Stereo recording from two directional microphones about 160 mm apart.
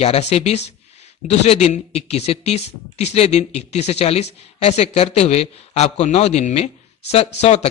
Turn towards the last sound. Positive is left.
turn(degrees=40)  # may be behind; listen again after turning